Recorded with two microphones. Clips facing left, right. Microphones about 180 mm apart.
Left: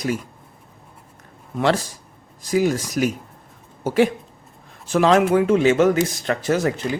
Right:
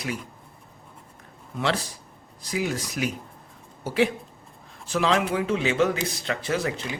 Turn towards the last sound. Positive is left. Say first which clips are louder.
# left 6 dB
turn(degrees=45)  # may be behind; listen again after turning